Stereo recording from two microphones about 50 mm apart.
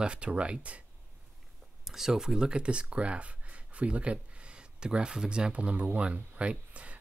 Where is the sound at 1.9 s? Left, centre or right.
Centre.